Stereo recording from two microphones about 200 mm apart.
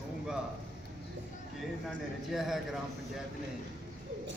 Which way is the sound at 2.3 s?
Centre (ahead or behind).